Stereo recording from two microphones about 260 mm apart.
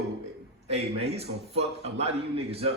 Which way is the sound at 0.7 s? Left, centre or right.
Right.